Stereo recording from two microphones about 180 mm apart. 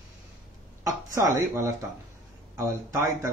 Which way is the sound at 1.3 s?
15° right (ahead or behind).